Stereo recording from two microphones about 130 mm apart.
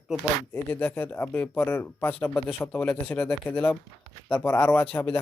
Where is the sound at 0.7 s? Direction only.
15° left (ahead or behind).